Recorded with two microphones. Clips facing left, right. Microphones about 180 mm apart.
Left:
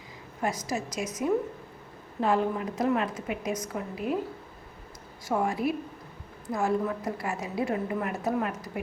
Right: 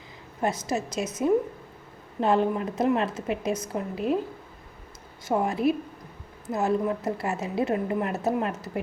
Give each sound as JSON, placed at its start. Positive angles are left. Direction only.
{"t": 0.4, "sound": "a woman's voice", "side_deg": -25}
{"t": 5.3, "sound": "a woman's voice", "side_deg": -20}